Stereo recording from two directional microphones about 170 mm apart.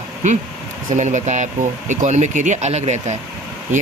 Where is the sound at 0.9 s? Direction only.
45° right (ahead or behind).